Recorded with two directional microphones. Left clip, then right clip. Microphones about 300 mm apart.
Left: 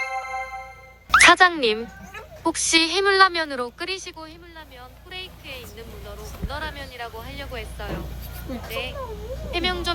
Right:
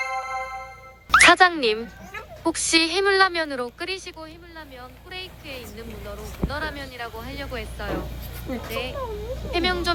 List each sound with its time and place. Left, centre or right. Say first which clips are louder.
0.1 s music: right 1 dB; left
1.1 s speech: left 1 dB; centre